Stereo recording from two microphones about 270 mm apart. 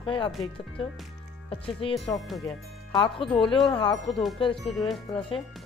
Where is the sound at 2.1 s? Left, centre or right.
Centre.